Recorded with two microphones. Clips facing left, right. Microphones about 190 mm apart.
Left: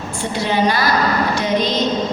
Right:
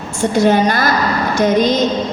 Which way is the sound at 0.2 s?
45° right (ahead or behind).